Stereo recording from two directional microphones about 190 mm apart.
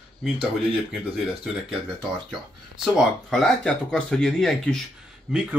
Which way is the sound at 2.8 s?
Centre (ahead or behind).